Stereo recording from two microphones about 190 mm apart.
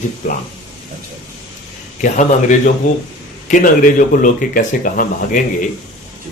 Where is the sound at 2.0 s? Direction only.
40° left (ahead or behind).